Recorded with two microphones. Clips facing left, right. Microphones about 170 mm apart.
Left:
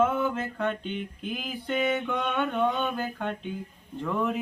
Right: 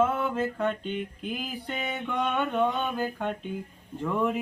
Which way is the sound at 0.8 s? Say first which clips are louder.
Right 1 dB; 45° right (ahead or behind).